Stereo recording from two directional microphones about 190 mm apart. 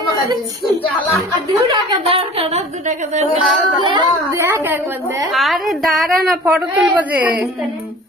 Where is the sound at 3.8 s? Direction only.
25° right (ahead or behind).